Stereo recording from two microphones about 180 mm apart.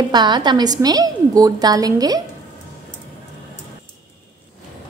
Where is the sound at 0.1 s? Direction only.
25° right (ahead or behind).